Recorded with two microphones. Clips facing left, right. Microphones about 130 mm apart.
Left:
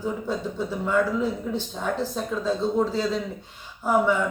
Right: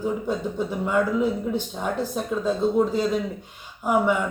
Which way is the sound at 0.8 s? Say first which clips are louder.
Right 1 dB; 15° right (ahead or behind).